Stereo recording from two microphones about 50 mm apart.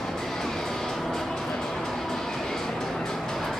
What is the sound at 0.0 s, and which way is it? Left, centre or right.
Music, centre.